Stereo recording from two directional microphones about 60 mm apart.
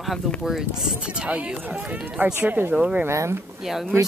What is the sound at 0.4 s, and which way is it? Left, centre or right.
Speech, centre.